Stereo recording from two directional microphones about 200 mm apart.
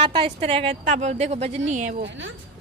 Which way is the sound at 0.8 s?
40° right (ahead or behind).